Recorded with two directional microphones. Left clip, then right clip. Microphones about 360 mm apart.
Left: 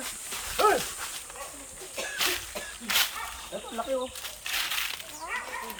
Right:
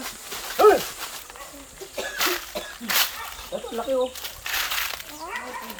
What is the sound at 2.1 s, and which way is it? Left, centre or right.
Cough, centre.